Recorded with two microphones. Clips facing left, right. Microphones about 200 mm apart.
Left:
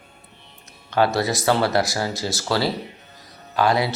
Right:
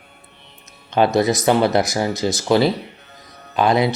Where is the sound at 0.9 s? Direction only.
20° right (ahead or behind).